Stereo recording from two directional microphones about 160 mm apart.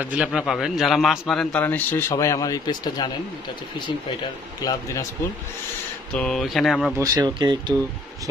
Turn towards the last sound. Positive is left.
turn(degrees=-25)  # may be behind; listen again after turning